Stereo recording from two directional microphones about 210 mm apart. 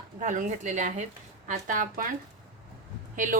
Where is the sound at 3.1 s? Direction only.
35° right (ahead or behind).